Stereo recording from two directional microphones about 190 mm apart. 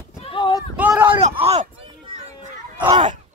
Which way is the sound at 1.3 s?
35° right (ahead or behind).